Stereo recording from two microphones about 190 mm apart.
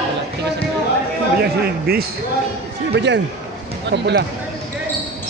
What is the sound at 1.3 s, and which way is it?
Speech, 55° right (ahead or behind).